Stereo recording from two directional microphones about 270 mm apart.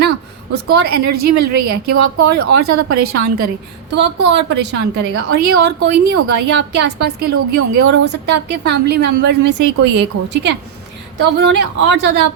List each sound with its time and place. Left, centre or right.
0.5 s a woman's voice: right
1.3 s a woman's voice: right
1.7 s a woman's voice: right